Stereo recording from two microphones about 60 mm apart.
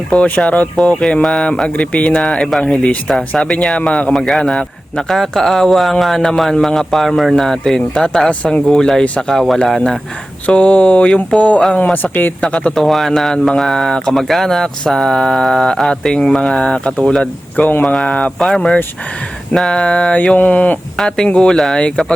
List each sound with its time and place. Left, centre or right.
0.1 s speech: centre
4.1 s a man's voice: centre
8.3 s speech: left
8.6 s speech: centre
10.4 s speech: left
12.7 s a man's voice: centre
18.3 s a man's voice: centre; by 20.7 s left
21.2 s speech: centre